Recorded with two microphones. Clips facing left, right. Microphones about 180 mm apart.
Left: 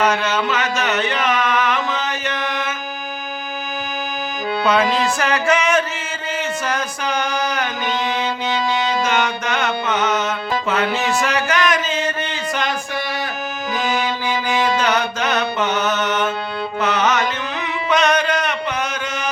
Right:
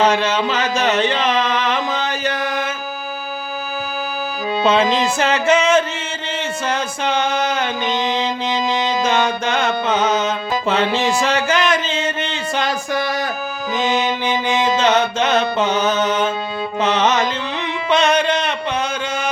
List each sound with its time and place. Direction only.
0.0 s music: 30° right (ahead or behind)
4.6 s music: 25° right (ahead or behind)
13.7 s music: 25° right (ahead or behind)